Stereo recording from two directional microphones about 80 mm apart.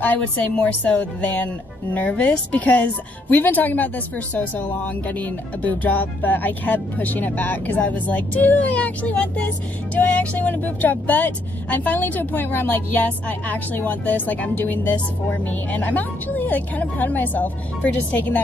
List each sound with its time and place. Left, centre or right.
0.0 s speech: centre